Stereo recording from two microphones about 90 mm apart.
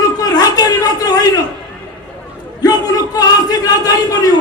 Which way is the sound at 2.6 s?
45° left (ahead or behind).